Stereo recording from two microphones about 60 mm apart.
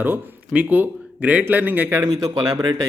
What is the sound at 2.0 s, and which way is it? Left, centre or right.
Speech, right.